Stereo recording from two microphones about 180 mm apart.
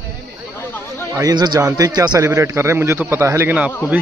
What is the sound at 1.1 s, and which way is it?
A man's voice, 20° right (ahead or behind).